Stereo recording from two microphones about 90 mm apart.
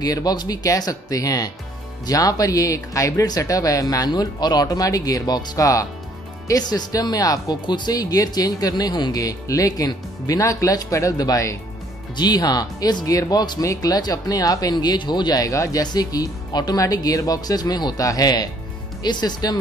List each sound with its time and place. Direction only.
0.0 s speech: 45° left (ahead or behind)
7.6 s speech: 55° left (ahead or behind)